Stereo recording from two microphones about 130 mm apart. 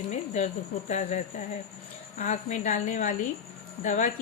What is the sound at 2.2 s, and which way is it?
A woman's voice, 65° left (ahead or behind).